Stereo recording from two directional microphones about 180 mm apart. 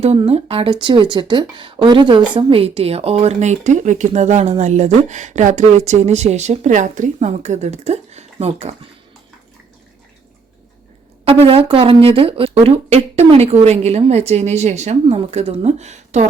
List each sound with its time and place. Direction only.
0.0 s speech: 35° right (ahead or behind)
11.3 s speech: 30° right (ahead or behind)